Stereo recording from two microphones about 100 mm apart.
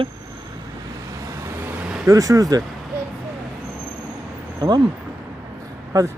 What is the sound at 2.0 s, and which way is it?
Speech, 35° right (ahead or behind).